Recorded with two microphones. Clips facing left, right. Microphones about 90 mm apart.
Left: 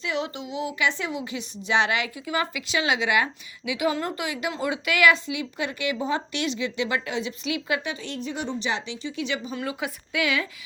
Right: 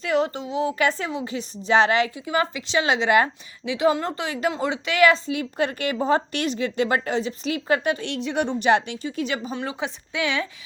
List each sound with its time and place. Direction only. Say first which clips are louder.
0.0 s a woman's voice: right 6 dB; 40° right (ahead or behind)
8.0 s a woman's voice: right 6 dB; 75° right (ahead or behind); by 9.6 s 40° right (ahead or behind)
9.6 s a woman's voice: right 1 dB; 30° right (ahead or behind)